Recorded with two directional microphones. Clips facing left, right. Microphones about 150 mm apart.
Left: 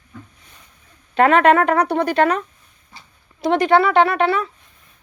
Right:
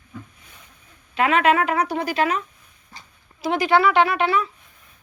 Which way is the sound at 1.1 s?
55° left (ahead or behind).